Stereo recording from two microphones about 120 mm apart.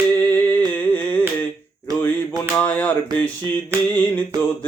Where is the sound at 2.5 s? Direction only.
15° left (ahead or behind).